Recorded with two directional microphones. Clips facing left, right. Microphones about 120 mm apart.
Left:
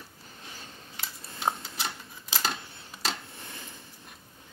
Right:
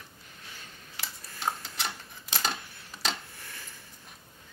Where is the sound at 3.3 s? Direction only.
20° left (ahead or behind).